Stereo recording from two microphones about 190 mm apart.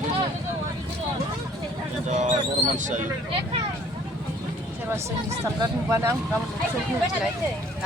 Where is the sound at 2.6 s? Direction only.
40° right (ahead or behind).